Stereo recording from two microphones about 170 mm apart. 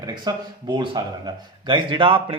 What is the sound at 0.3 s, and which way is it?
A man's voice, 25° right (ahead or behind).